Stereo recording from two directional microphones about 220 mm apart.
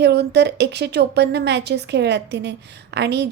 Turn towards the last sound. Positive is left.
turn(degrees=-50)  # may be behind; listen again after turning